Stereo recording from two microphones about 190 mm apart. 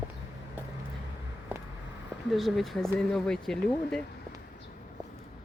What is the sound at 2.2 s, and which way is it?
Speech, centre (ahead or behind).